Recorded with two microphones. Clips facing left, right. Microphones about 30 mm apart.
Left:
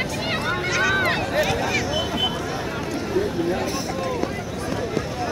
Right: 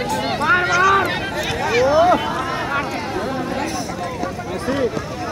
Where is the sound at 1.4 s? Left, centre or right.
Centre.